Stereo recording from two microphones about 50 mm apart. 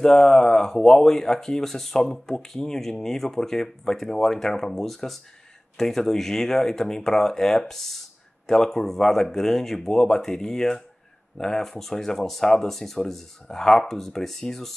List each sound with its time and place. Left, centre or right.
0.0 s speech: centre